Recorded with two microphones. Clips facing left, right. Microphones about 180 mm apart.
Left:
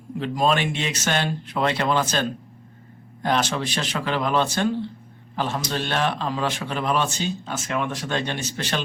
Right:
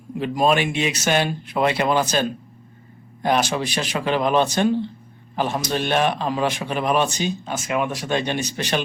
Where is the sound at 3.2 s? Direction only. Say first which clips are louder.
Right 3 dB; 10° right (ahead or behind).